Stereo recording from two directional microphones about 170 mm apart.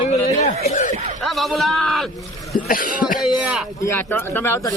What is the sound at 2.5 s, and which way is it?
Cough, 55° left (ahead or behind).